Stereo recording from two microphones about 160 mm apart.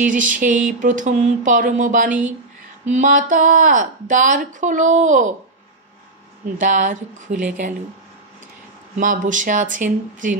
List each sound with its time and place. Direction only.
0.0 s speech: 55° right (ahead or behind)
6.6 s speech: 55° right (ahead or behind)
8.9 s speech: 50° right (ahead or behind)